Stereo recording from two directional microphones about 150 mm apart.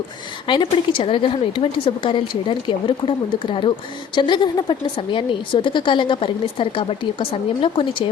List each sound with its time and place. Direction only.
0.4 s a woman's voice: 30° left (ahead or behind)